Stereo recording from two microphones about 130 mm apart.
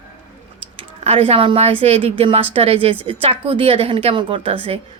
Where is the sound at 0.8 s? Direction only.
45° right (ahead or behind).